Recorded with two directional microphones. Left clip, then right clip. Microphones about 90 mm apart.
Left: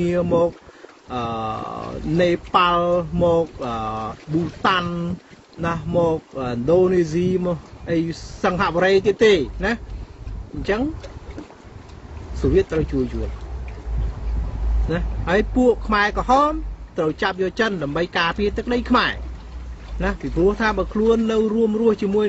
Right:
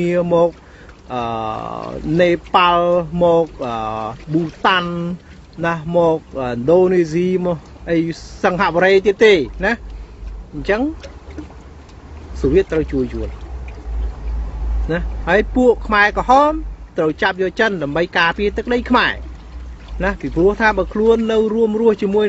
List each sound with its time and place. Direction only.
0.0 s speech: 45° left (ahead or behind)
12.4 s speech: 45° left (ahead or behind)
14.9 s speech: 45° left (ahead or behind)